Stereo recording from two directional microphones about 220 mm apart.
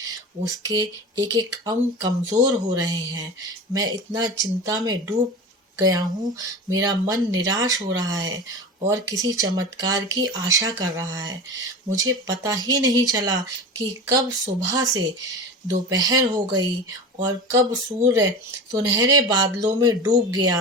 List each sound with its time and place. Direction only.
0.0 s speech: 15° right (ahead or behind)